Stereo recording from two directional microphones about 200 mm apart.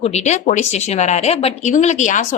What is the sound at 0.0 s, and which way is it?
A woman's voice, 35° left (ahead or behind).